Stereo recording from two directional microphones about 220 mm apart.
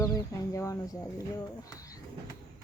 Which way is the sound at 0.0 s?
15° left (ahead or behind).